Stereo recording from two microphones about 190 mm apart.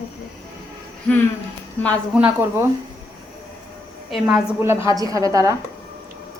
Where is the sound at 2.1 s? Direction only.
10° right (ahead or behind).